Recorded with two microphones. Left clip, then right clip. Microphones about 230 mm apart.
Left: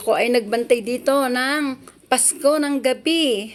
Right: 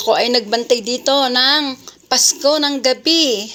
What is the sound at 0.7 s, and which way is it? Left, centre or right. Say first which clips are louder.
Speech: right 2 dB; right.